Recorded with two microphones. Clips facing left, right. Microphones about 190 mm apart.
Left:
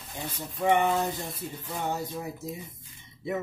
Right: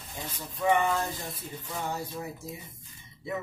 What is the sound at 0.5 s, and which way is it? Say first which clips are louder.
Speech: left 2 dB; 25° left (ahead or behind).